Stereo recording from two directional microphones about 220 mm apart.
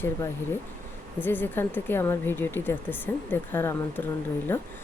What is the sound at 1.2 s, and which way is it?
Speech, 10° left (ahead or behind).